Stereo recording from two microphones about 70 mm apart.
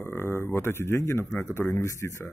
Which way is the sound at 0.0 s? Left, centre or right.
Left.